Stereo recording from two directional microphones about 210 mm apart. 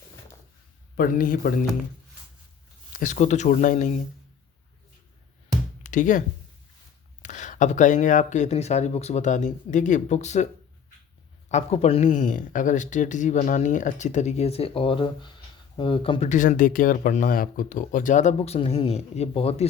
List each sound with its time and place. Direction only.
0.9 s speech: 40° left (ahead or behind)
3.0 s speech: 35° left (ahead or behind)
5.8 s speech: 35° left (ahead or behind)
11.5 s speech: 30° left (ahead or behind)